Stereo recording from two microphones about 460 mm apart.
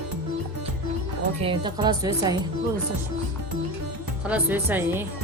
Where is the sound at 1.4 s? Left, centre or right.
Centre.